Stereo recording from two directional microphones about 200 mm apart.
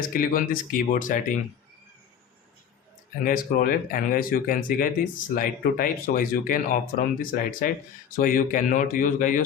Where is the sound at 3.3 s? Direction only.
45° left (ahead or behind).